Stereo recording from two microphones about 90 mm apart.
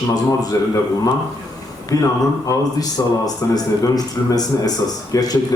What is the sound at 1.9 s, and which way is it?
A man's voice, 40° left (ahead or behind).